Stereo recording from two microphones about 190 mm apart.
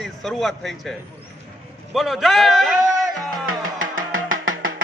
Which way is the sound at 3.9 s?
90° right.